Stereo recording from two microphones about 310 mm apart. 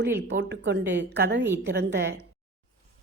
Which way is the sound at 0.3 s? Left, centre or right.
Right.